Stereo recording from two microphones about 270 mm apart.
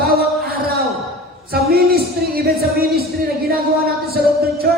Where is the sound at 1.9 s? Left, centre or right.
Right.